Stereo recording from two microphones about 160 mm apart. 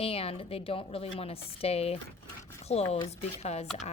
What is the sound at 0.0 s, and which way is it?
A woman's voice, 35° left (ahead or behind).